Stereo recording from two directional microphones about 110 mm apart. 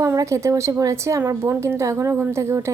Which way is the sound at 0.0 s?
25° right (ahead or behind).